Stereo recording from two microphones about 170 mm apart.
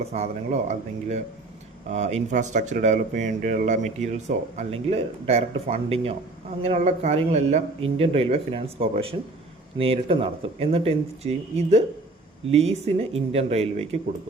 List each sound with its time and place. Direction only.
0.0 s speech: 40° right (ahead or behind)
4.5 s speech: 35° right (ahead or behind)